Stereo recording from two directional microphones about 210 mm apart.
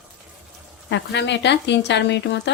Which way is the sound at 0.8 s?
55° left (ahead or behind).